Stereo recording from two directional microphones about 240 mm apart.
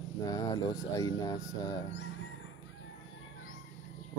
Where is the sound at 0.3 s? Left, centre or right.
Centre.